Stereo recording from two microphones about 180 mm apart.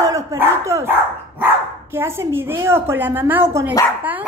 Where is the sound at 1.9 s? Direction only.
15° right (ahead or behind).